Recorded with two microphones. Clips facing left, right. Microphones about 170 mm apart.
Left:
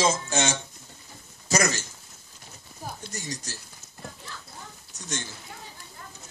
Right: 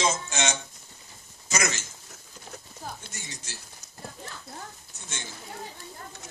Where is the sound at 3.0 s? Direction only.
40° left (ahead or behind).